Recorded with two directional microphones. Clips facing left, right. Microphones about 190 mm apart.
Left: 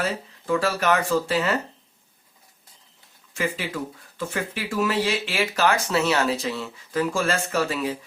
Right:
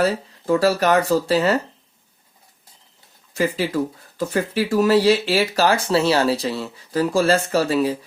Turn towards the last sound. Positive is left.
turn(degrees=-35)  # may be behind; listen again after turning